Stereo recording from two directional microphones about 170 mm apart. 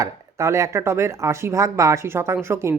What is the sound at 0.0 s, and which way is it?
Speech, 15° right (ahead or behind).